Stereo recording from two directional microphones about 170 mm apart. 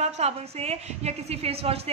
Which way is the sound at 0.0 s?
40° right (ahead or behind).